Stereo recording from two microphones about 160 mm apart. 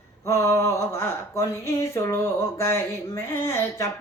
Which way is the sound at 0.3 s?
15° left (ahead or behind).